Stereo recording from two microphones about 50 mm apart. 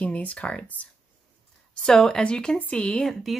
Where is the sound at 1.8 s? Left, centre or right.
Centre.